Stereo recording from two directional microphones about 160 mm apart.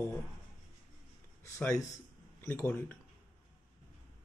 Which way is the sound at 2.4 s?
10° left (ahead or behind).